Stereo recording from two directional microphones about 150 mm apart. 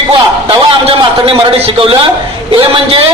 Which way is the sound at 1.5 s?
40° right (ahead or behind).